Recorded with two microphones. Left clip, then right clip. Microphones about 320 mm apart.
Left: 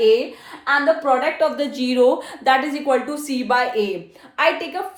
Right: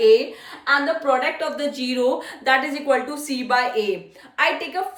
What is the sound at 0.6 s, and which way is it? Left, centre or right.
A woman's voice, centre.